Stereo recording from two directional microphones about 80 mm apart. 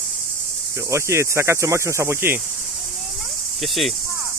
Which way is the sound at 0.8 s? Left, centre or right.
Right.